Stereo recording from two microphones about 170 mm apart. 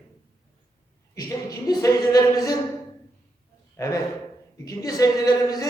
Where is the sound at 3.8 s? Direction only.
20° left (ahead or behind).